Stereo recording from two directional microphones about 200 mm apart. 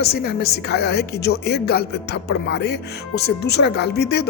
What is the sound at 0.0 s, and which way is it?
A woman's voice, 50° left (ahead or behind).